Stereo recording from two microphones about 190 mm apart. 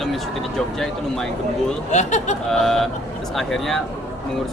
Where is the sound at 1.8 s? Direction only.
40° left (ahead or behind).